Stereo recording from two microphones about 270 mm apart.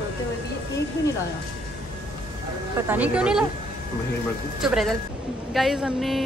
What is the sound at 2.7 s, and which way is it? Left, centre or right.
Speech, centre.